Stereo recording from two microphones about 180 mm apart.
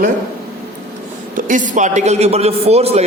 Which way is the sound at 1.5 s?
45° right (ahead or behind).